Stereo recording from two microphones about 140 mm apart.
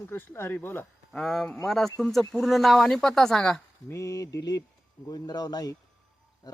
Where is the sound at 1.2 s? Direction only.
5° left (ahead or behind).